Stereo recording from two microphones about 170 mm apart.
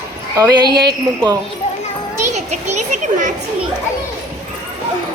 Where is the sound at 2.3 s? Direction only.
45° right (ahead or behind).